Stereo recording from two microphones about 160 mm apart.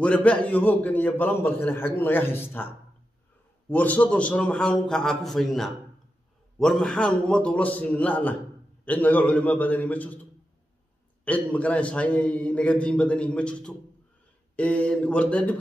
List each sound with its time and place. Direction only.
0.0 s a man's voice: 10° left (ahead or behind)
3.7 s a man's voice: 10° left (ahead or behind)
11.2 s a man's voice: 10° left (ahead or behind)